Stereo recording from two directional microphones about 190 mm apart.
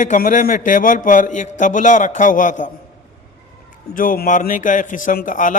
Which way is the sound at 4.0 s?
45° left (ahead or behind).